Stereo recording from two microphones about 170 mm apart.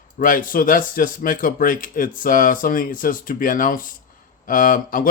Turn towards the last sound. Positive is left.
turn(degrees=55)  # may be behind; listen again after turning